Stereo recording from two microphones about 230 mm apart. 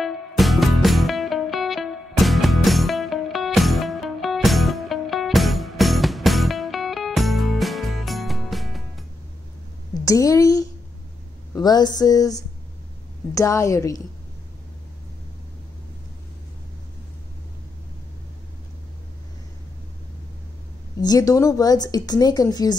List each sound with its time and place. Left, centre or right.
0.0 s music: centre
10.0 s a woman's voice: centre
21.0 s speech: centre